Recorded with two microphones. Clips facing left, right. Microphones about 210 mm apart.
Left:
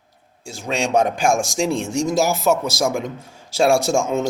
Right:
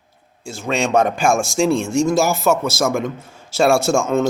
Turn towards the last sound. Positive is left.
turn(degrees=15)  # may be behind; listen again after turning